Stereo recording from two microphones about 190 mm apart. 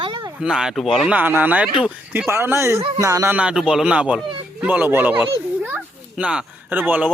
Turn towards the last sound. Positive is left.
turn(degrees=-10)  # may be behind; listen again after turning